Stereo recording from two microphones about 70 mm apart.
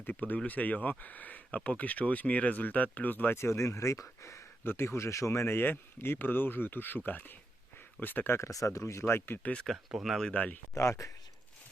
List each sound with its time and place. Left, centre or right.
0.0 s speech: left
3.3 s speech: left
4.6 s speech: left
8.4 s speech: left
9.9 s speech: centre
10.3 s speech: left
10.8 s speech: left